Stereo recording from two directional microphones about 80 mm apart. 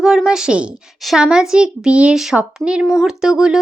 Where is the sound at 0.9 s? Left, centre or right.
Centre.